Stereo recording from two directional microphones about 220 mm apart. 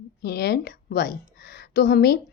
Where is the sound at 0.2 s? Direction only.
45° left (ahead or behind).